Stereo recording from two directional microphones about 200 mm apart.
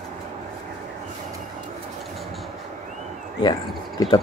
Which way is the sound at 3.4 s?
20° left (ahead or behind).